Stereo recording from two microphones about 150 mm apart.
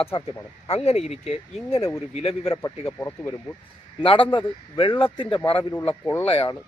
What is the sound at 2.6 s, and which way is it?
Speech, 15° left (ahead or behind).